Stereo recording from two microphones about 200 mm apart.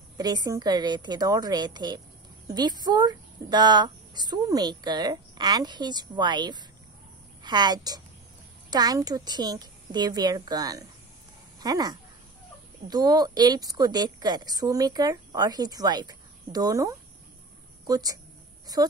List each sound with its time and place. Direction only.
0.2 s speech: 20° right (ahead or behind)